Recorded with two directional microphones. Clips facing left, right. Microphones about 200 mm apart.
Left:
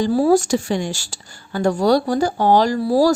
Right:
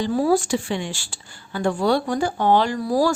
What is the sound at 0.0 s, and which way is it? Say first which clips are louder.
A woman's voice: left 4 dB; 35° left (ahead or behind).